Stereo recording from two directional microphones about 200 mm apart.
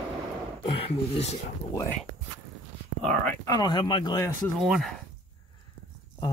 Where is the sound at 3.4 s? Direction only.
20° left (ahead or behind).